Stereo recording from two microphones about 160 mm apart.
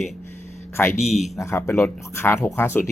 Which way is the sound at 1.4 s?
15° left (ahead or behind).